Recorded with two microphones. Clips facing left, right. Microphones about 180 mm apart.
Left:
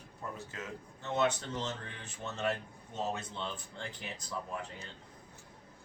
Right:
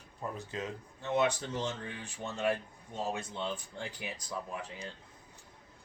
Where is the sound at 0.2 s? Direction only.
20° right (ahead or behind).